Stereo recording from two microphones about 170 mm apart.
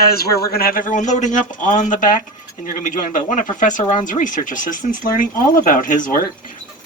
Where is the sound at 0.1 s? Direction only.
65° left (ahead or behind); by 6.2 s 50° left (ahead or behind).